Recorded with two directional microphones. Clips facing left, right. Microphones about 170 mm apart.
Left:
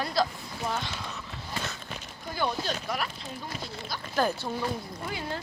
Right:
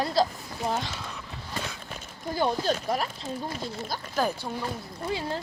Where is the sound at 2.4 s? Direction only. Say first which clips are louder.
Right 4 dB; 35° right (ahead or behind).